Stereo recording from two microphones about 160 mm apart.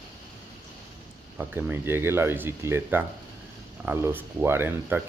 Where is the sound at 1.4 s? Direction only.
15° right (ahead or behind).